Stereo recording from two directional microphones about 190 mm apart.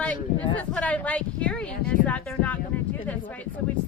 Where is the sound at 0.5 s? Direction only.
5° left (ahead or behind).